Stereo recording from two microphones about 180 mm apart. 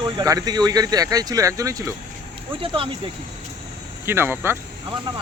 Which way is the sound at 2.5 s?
30° right (ahead or behind).